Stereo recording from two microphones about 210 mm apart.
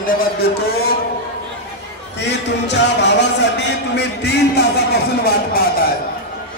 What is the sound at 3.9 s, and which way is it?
Speech, 55° left (ahead or behind).